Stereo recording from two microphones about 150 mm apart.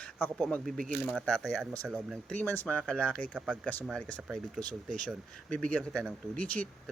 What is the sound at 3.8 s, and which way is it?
Speech, 5° left (ahead or behind).